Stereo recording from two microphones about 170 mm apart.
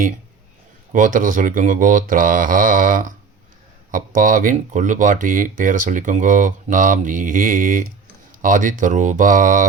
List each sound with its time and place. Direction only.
0.9 s speech: 50° right (ahead or behind)